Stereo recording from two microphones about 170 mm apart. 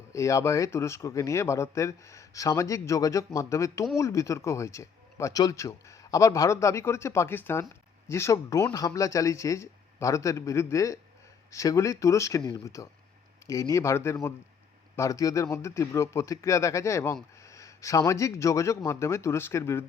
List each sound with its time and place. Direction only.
0.1 s speech: 20° left (ahead or behind)